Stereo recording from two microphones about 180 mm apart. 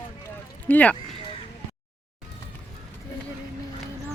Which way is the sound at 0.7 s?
10° left (ahead or behind).